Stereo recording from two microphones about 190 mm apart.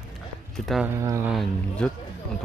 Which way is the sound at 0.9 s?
15° right (ahead or behind).